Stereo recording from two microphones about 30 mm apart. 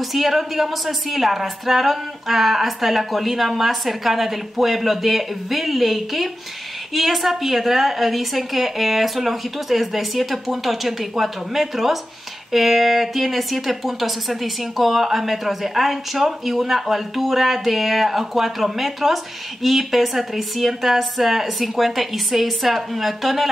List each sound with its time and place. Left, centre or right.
0.0 s speech: centre